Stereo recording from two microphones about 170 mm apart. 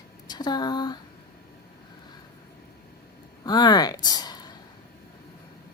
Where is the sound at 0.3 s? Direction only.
25° left (ahead or behind).